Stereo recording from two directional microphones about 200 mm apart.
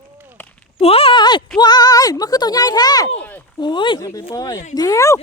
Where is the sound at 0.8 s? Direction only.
30° left (ahead or behind).